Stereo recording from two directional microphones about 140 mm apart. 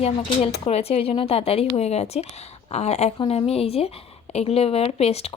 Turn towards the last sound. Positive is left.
turn(degrees=45)  # may be behind; listen again after turning